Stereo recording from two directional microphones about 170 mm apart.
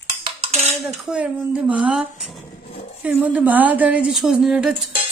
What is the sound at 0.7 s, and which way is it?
A woman's voice, centre (ahead or behind).